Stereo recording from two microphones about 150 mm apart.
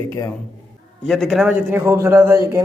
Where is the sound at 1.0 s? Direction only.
Centre (ahead or behind); by 2.6 s 15° right (ahead or behind).